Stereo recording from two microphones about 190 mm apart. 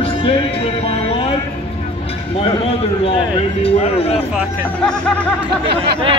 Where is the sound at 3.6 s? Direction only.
35° left (ahead or behind).